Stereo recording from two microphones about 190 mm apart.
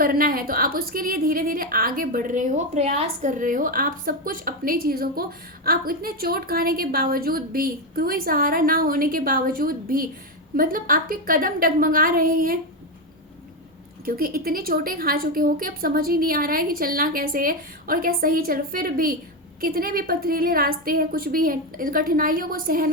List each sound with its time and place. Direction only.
0.0 s a woman's voice: 50° right (ahead or behind)
14.0 s a woman's voice: 50° right (ahead or behind)